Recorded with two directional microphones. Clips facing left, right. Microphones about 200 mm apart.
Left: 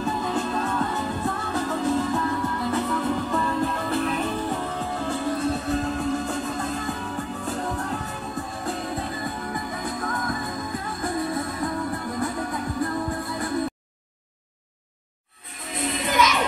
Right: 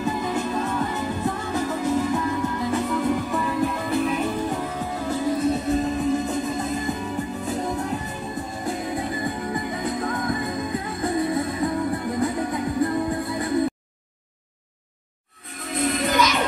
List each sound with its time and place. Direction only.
0.0 s music: 10° right (ahead or behind)